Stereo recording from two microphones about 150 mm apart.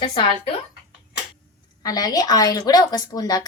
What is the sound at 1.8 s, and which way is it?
A woman's voice, 25° left (ahead or behind).